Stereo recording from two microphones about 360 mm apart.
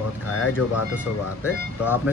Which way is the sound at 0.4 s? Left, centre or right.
Left.